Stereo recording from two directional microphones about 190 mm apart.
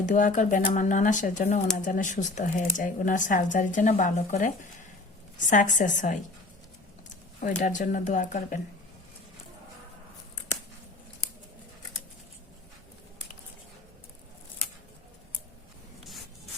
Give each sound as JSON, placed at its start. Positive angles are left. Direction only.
{"t": 0.0, "sound": "speech", "side_deg": 40}
{"t": 7.4, "sound": "speech", "side_deg": 40}